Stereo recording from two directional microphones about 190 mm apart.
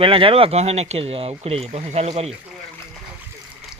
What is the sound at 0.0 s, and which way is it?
Speech, 30° right (ahead or behind).